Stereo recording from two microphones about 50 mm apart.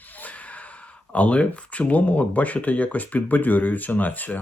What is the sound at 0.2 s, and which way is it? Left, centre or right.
Gasp, left.